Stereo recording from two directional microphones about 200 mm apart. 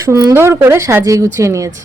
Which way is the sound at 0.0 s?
15° right (ahead or behind).